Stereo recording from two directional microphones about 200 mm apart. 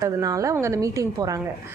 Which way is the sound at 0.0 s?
15° right (ahead or behind).